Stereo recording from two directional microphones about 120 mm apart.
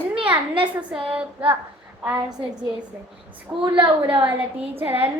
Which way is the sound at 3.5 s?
20° right (ahead or behind).